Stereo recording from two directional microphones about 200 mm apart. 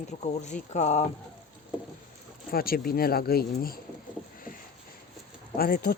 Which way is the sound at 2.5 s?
50° left (ahead or behind).